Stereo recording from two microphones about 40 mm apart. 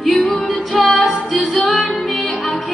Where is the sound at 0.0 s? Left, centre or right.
Centre.